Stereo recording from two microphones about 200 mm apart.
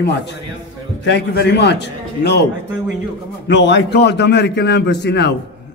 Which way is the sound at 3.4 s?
65° left (ahead or behind).